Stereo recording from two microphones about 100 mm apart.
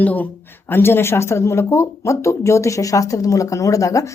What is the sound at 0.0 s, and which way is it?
Speech, 15° left (ahead or behind).